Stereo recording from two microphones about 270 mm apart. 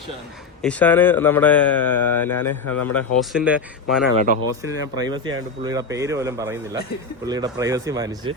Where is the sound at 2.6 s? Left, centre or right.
Left.